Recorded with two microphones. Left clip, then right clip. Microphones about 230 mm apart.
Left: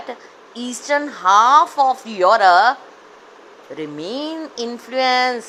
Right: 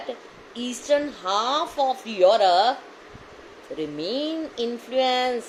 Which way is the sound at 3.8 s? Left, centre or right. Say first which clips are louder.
Left 1 dB; left.